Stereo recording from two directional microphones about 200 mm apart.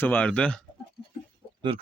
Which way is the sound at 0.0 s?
10° left (ahead or behind).